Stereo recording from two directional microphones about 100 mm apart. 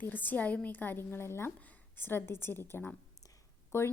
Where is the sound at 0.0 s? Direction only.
20° left (ahead or behind).